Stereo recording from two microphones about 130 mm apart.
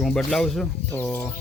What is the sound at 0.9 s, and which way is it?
Bird, 15° left (ahead or behind).